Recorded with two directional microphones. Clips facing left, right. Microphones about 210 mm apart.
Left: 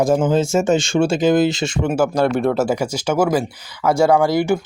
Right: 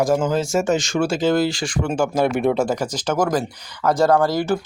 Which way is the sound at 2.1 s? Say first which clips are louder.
Left 1 dB; 5° right (ahead or behind).